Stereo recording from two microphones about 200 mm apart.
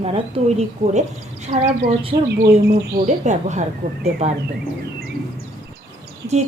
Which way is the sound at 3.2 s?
35° right (ahead or behind).